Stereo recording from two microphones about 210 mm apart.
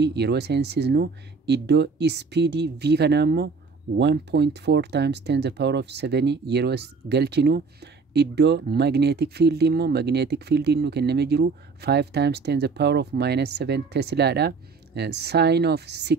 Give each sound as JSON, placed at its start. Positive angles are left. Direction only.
{"t": 0.0, "sound": "speech", "side_deg": -50}